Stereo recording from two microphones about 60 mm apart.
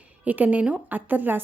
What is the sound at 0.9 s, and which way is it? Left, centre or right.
Speech, right.